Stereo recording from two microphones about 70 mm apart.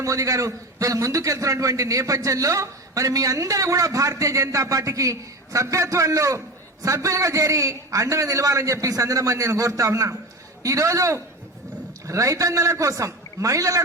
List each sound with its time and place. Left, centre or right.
0.0 s a man's voice: right